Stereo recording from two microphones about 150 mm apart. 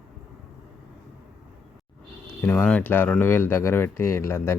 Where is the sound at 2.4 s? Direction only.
10° left (ahead or behind).